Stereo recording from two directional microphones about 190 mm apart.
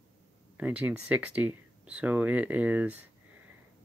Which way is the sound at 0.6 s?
10° right (ahead or behind).